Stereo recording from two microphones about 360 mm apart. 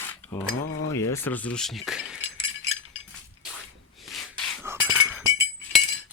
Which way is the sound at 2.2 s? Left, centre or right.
Centre.